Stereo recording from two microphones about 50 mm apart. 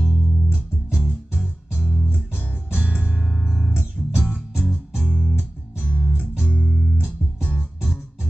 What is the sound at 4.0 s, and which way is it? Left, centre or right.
Music, centre.